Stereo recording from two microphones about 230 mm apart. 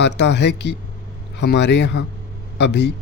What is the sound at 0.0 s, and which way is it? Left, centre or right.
Speech, left.